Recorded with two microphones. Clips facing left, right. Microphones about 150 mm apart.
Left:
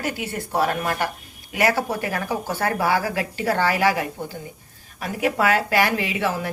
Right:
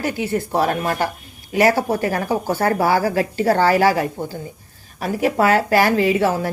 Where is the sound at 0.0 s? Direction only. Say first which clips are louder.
Right 6 dB; 25° right (ahead or behind).